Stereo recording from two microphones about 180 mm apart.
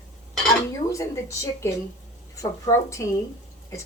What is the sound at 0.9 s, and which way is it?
A woman's voice, 15° left (ahead or behind).